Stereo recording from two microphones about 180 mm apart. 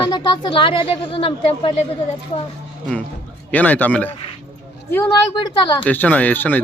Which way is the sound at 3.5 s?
10° left (ahead or behind).